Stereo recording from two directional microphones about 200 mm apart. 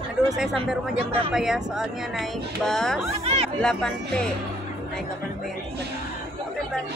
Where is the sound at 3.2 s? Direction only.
30° right (ahead or behind).